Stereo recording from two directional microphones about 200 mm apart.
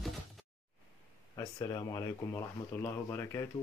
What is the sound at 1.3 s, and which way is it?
Speech, 20° left (ahead or behind).